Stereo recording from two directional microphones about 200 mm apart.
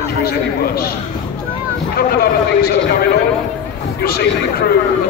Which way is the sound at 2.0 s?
50° left (ahead or behind).